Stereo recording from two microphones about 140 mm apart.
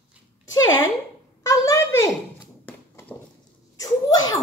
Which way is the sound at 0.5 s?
25° left (ahead or behind).